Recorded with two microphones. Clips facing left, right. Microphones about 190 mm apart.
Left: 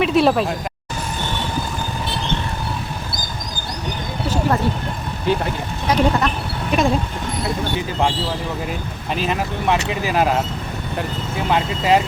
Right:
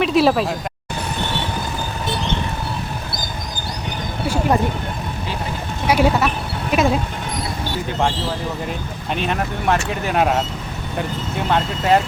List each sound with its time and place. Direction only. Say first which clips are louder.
0.0 s speech: even; centre (ahead or behind)
4.3 s a sound: right 1 dB; 15° right (ahead or behind)
5.9 s speech: right 1 dB; 5° right (ahead or behind)
9.0 s speech: even; centre (ahead or behind)